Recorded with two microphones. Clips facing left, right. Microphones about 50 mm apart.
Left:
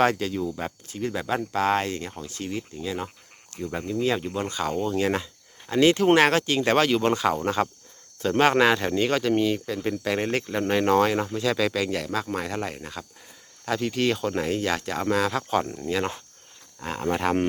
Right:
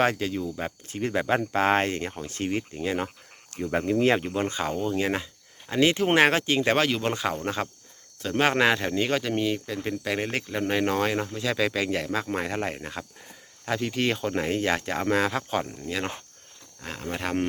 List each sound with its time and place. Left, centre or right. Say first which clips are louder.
0.0 s speech: left 2 dB; centre
0.9 s speech: right 3 dB; right
4.4 s speech: even; right
4.7 s speech: left 2 dB; centre
13.7 s speech: left 2 dB; centre
15.3 s speech: left 3 dB; centre
16.8 s speech: left 6 dB; centre